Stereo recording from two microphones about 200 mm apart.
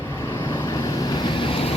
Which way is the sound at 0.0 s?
15° left (ahead or behind).